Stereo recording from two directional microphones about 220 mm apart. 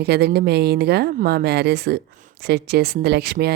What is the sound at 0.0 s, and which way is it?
Speech, 45° right (ahead or behind).